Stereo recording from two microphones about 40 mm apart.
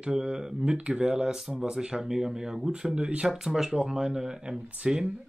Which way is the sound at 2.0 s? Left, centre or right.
Centre.